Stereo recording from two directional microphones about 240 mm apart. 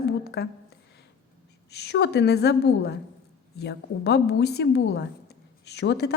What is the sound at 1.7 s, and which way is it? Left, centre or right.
A woman's voice, left.